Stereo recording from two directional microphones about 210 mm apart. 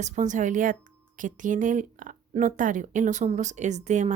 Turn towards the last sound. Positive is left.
turn(degrees=-35)  # may be behind; listen again after turning